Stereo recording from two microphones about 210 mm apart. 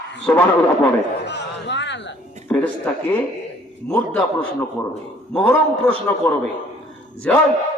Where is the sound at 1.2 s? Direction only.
55° left (ahead or behind).